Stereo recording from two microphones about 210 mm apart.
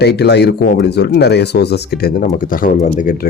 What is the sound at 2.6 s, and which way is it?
Speech, 40° left (ahead or behind).